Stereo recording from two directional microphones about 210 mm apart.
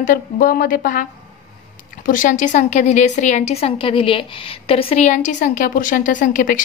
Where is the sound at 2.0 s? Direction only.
40° left (ahead or behind).